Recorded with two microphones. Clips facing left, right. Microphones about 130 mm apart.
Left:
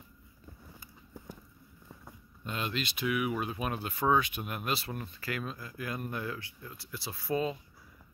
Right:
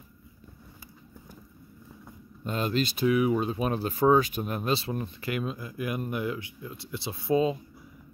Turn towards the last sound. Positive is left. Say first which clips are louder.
# right 7 dB
turn(degrees=-20)  # may be behind; listen again after turning